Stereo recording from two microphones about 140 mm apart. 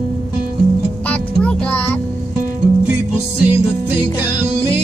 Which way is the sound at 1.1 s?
10° left (ahead or behind).